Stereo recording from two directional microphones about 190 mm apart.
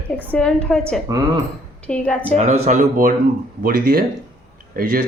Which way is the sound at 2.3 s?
35° right (ahead or behind).